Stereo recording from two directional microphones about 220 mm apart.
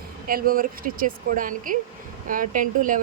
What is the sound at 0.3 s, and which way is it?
A woman's voice, 40° right (ahead or behind).